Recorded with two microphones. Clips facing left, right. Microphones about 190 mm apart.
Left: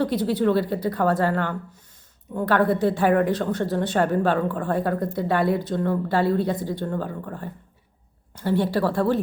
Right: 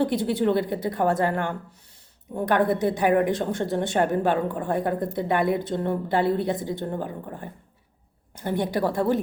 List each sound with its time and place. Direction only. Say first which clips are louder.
0.0 s a woman's voice: left 1 dB; 25° right (ahead or behind)